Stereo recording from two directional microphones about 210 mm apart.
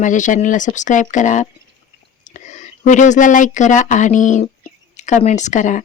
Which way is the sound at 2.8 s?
35° left (ahead or behind).